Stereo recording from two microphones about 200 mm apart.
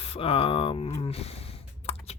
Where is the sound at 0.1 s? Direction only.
30° left (ahead or behind).